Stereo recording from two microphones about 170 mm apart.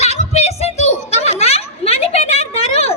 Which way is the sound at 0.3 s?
40° left (ahead or behind).